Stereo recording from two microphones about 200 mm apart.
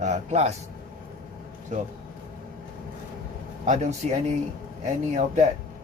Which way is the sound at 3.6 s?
35° right (ahead or behind).